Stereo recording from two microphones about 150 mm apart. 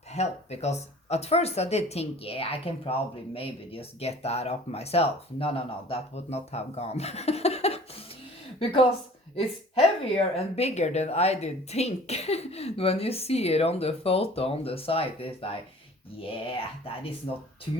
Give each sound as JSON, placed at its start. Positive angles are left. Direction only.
{"t": 0.1, "sound": "speech", "side_deg": 45}